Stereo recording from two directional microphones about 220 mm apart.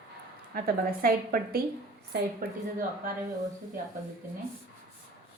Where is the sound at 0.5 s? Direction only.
40° right (ahead or behind).